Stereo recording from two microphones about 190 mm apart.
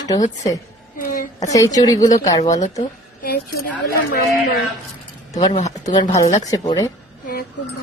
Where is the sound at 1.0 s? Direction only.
45° left (ahead or behind).